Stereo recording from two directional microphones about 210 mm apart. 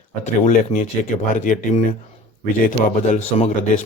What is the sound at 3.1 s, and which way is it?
Speech, 30° left (ahead or behind).